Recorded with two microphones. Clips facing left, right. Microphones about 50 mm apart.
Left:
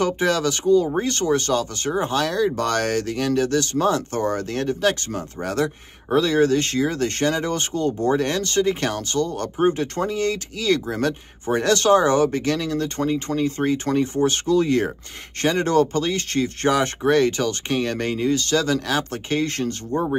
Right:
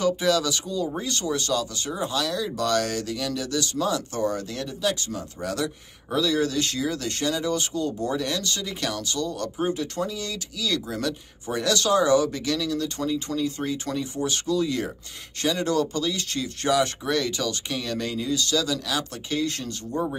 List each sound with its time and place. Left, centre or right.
0.0 s speech: left